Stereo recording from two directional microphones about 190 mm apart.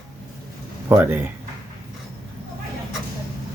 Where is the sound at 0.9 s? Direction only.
10° right (ahead or behind).